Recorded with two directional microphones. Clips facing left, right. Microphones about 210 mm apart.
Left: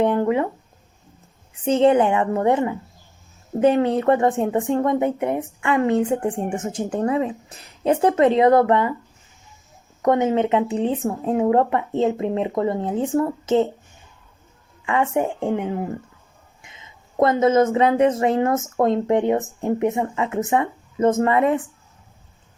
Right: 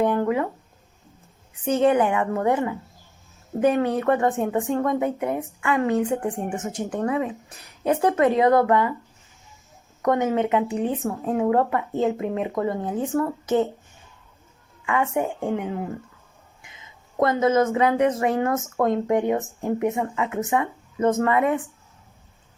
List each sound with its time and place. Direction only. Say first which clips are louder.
0.0 s a sound: left 3 dB; 25° left (ahead or behind)
1.6 s speech: left 3 dB; 25° left (ahead or behind)
10.0 s speech: left 3 dB; 25° left (ahead or behind)
14.8 s speech: left 3 dB; 25° left (ahead or behind)